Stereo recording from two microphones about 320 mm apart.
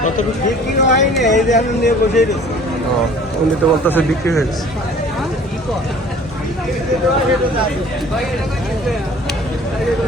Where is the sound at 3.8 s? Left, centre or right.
Centre.